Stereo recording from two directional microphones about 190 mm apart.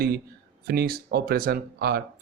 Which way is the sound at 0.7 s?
55° right (ahead or behind).